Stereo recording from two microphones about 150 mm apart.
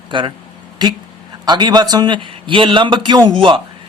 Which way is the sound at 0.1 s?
35° right (ahead or behind).